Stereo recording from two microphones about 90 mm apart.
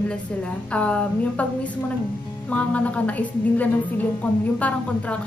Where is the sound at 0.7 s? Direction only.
15° left (ahead or behind).